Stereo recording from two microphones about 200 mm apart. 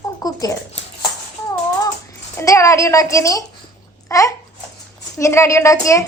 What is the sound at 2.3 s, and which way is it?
A woman's voice, 15° left (ahead or behind).